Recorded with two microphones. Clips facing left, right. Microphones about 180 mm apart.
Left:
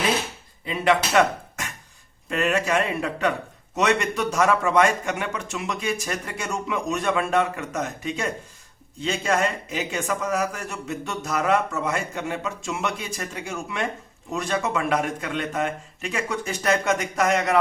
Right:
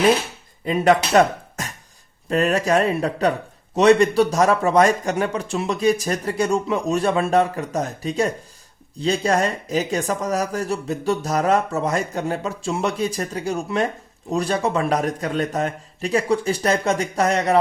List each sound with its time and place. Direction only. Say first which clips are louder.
0.6 s speech: right 5 dB; 45° right (ahead or behind)